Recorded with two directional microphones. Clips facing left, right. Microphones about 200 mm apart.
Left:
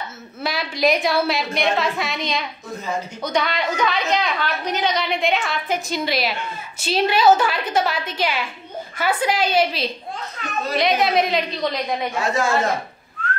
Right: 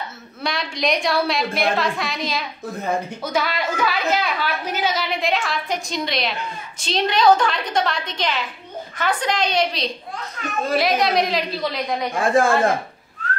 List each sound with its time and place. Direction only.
0.4 s a woman's voice: 5° left (ahead or behind)
12.1 s a woman's voice: 55° right (ahead or behind)
13.2 s whistling: 40° right (ahead or behind)